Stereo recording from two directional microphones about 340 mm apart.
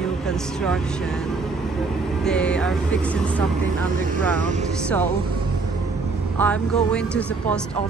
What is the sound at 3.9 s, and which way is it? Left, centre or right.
Speech, right.